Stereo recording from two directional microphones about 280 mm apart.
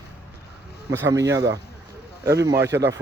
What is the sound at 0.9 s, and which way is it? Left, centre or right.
Speech, centre.